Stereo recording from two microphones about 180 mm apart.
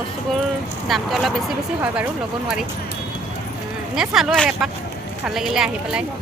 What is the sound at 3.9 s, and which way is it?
Speech, centre (ahead or behind).